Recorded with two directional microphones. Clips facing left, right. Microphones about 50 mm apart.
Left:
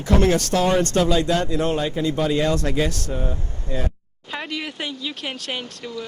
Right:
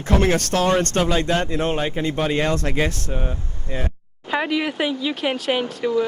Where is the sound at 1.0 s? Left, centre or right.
Right.